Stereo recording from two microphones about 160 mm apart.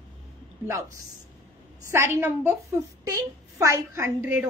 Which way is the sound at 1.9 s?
15° right (ahead or behind).